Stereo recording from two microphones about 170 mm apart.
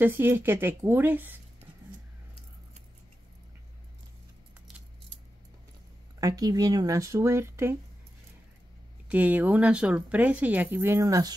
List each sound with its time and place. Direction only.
0.0 s speech: 15° right (ahead or behind)
6.2 s speech: 20° right (ahead or behind)
9.1 s speech: 10° right (ahead or behind)